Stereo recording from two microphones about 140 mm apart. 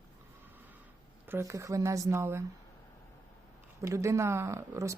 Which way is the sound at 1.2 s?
20° right (ahead or behind).